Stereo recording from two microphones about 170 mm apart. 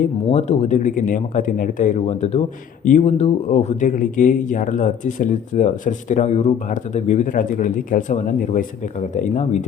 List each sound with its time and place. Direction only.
0.3 s speech: 40° left (ahead or behind)